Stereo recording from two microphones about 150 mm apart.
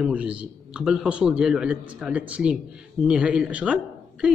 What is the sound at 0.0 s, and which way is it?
Speech, 5° right (ahead or behind).